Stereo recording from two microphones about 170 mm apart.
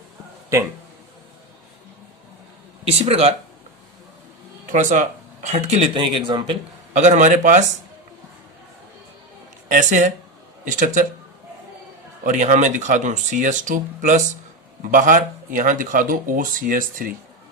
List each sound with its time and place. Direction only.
2.8 s speech: 35° right (ahead or behind)
4.6 s speech: 50° right (ahead or behind); by 6.6 s 30° right (ahead or behind)
6.9 s speech: 45° right (ahead or behind)
9.6 s a woman's voice: 50° right (ahead or behind)
12.2 s speech: 50° right (ahead or behind)